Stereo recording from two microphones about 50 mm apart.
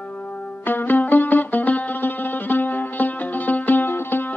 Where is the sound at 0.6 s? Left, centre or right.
Left.